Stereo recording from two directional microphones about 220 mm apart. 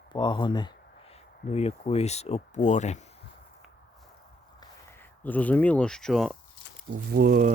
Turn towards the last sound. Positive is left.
turn(degrees=-40)  # may be behind; listen again after turning